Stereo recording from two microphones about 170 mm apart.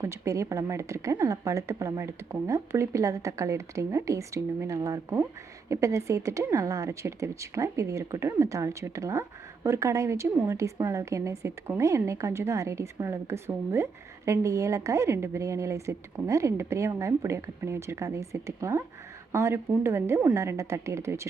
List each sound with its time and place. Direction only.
0.0 s speech: 15° right (ahead or behind)